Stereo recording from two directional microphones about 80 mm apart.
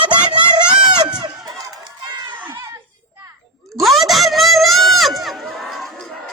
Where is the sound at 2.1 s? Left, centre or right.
Right.